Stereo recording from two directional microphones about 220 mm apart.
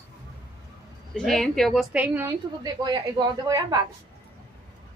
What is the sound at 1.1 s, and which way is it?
Speech, centre (ahead or behind).